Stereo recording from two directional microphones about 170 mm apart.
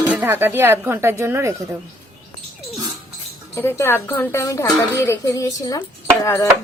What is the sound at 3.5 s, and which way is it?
Speech, 15° left (ahead or behind).